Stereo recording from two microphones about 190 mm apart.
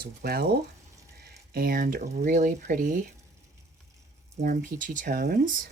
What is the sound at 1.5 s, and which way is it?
Speech, 50° right (ahead or behind).